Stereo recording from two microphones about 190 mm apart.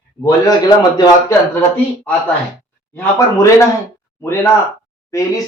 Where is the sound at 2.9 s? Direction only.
15° left (ahead or behind).